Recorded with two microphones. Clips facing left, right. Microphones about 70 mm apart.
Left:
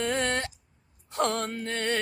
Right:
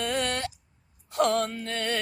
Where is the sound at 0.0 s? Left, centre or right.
Left.